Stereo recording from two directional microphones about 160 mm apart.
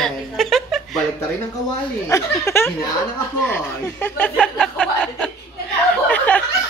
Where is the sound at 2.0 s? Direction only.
15° left (ahead or behind).